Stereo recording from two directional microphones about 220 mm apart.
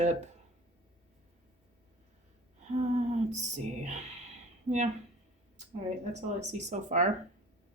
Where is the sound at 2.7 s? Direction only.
30° right (ahead or behind).